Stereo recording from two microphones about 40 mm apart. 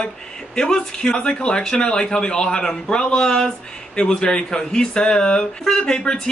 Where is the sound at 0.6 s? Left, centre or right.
Centre.